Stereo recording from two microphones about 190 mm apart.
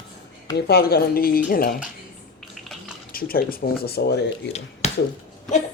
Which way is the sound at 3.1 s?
50° left (ahead or behind).